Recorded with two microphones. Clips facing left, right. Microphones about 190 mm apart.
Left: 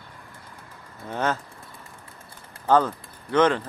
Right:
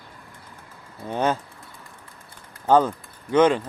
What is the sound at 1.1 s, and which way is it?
Speech, 15° right (ahead or behind).